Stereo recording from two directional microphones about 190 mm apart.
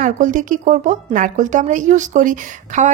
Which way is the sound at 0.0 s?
45° right (ahead or behind).